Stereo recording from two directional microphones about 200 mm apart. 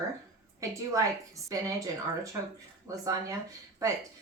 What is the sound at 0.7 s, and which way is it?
A woman's voice, 15° right (ahead or behind).